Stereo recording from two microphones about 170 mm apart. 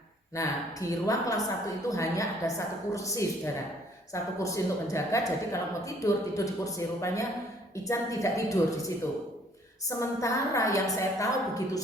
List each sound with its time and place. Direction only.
0.3 s a woman's voice: 20° left (ahead or behind)
10.0 s a woman's voice: 20° left (ahead or behind)